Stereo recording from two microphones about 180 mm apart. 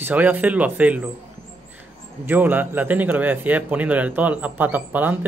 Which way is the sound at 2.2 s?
10° right (ahead or behind).